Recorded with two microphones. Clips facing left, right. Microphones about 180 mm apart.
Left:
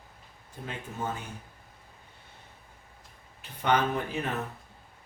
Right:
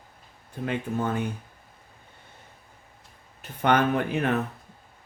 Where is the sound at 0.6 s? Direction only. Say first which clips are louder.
Right 8 dB; 65° right (ahead or behind).